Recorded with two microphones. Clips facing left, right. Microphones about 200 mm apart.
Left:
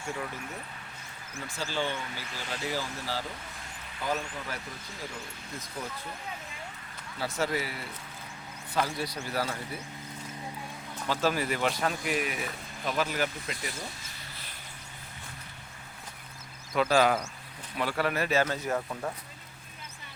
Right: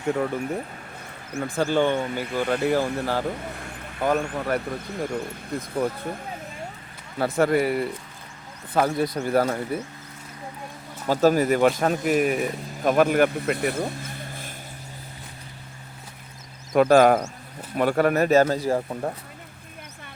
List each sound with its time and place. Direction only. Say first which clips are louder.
0.1 s speech: right 13 dB; 60° right (ahead or behind)
7.2 s speech: right 10 dB; 55° right (ahead or behind)
11.0 s speech: right 10 dB; 45° right (ahead or behind)
16.7 s speech: right 9 dB; 50° right (ahead or behind); by 19.1 s 35° right (ahead or behind)